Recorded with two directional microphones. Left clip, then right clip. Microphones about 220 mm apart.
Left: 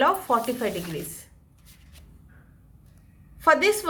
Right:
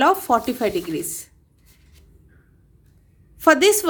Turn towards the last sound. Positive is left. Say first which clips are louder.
# right 5 dB
turn(degrees=-55)  # may be behind; listen again after turning